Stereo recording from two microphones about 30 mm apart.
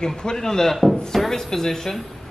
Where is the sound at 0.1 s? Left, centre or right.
Left.